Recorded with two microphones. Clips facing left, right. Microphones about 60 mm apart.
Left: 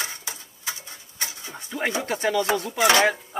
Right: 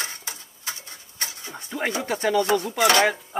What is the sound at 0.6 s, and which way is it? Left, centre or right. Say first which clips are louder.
Tick-tock: left 1 dB; left.